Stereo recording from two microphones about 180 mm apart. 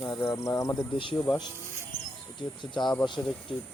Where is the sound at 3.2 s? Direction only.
20° left (ahead or behind).